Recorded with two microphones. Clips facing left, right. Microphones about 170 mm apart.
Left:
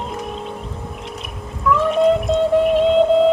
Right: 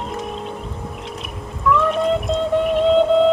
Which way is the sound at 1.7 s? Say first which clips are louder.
Left 3 dB; centre (ahead or behind).